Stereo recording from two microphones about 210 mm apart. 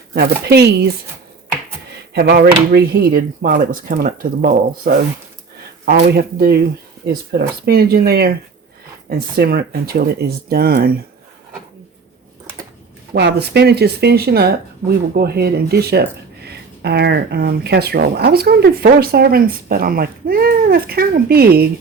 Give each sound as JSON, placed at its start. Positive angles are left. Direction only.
{"t": 0.1, "sound": "speech", "side_deg": -50}
{"t": 2.1, "sound": "speech", "side_deg": -50}
{"t": 13.1, "sound": "speech", "side_deg": -55}